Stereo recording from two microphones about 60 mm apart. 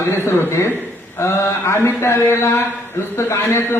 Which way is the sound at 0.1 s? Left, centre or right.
Left.